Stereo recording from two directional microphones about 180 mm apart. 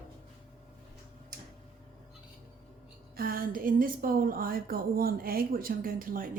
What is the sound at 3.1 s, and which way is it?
A woman's voice, 55° right (ahead or behind).